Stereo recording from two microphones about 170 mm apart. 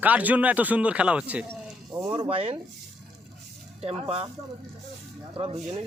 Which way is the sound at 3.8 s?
35° right (ahead or behind).